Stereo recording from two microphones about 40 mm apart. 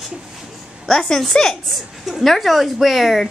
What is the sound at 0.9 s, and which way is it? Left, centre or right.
A woman's voice, centre.